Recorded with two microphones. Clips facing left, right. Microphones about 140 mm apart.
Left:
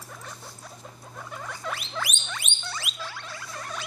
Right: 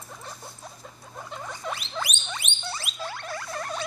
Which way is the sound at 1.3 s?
20° right (ahead or behind).